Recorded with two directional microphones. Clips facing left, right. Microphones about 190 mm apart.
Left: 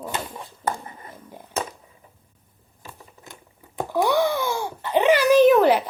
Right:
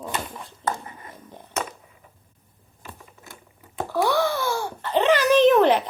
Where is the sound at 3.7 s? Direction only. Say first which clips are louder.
Left 1 dB; 15° left (ahead or behind).